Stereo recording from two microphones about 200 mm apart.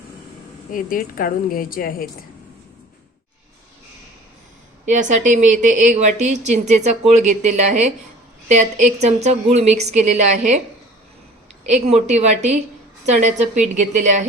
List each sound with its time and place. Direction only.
0.7 s a woman's voice: 45° left (ahead or behind)
4.9 s speech: 40° right (ahead or behind)
11.6 s speech: 35° right (ahead or behind)